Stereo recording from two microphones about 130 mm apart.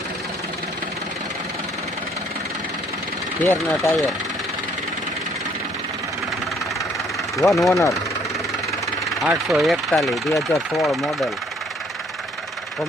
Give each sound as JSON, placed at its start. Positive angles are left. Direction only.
{"t": 3.4, "sound": "speech", "side_deg": 15}
{"t": 7.3, "sound": "speech", "side_deg": 0}
{"t": 9.2, "sound": "speech", "side_deg": -5}